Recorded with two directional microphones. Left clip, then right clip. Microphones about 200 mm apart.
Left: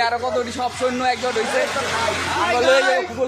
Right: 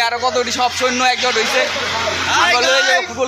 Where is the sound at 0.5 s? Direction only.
5° right (ahead or behind).